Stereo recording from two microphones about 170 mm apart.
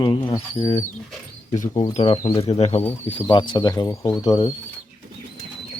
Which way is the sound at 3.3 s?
25° left (ahead or behind).